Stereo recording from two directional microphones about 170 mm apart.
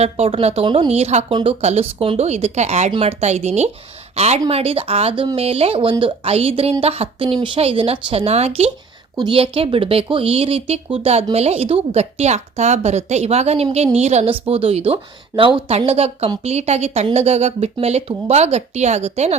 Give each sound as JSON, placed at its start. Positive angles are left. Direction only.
{"t": 0.0, "sound": "a woman's voice", "side_deg": -35}